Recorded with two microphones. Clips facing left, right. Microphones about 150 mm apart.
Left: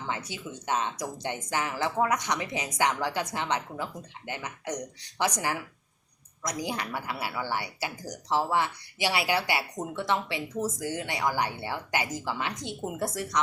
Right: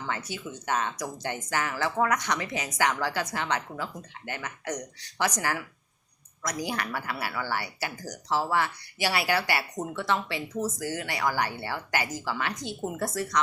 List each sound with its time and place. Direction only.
0.1 s speech: 20° left (ahead or behind)